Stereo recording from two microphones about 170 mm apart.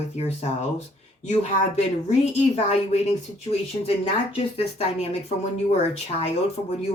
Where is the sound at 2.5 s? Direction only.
40° left (ahead or behind).